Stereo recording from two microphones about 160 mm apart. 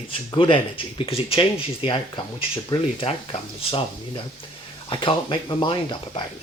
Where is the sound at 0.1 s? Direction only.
30° left (ahead or behind).